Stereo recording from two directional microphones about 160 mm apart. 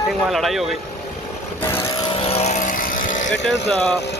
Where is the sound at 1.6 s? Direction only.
15° left (ahead or behind).